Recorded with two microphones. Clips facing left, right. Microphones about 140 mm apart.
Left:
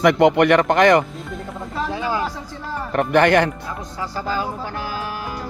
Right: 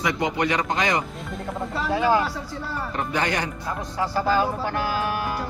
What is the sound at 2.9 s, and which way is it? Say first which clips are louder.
Speech: left 11 dB; 60° left (ahead or behind).